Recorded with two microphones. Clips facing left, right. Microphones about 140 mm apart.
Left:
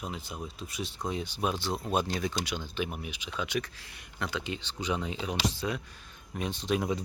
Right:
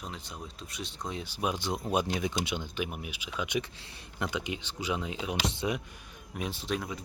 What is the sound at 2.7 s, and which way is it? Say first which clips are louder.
Speech: left 1 dB; 5° right (ahead or behind).